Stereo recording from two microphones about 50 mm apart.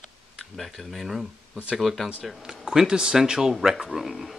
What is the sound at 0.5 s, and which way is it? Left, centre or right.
Speech, centre.